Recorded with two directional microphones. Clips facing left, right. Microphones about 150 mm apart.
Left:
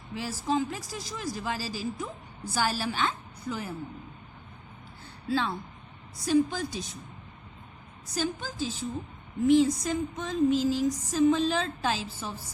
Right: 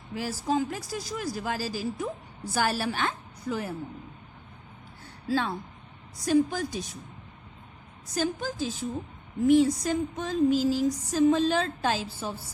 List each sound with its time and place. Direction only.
0.1 s speech: 45° right (ahead or behind)
5.3 s speech: 45° right (ahead or behind)
8.1 s speech: 50° right (ahead or behind)